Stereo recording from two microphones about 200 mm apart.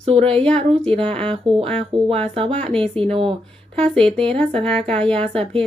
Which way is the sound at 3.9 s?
5° left (ahead or behind).